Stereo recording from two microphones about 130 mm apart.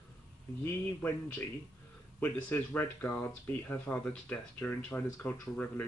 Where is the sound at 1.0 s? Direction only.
15° left (ahead or behind).